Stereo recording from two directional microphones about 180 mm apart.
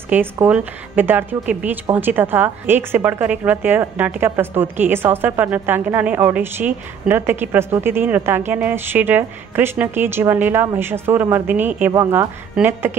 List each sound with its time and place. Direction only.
0.1 s a woman's voice: 10° right (ahead or behind)